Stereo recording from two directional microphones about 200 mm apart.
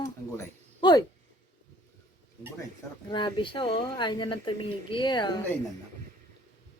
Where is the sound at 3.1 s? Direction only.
25° left (ahead or behind).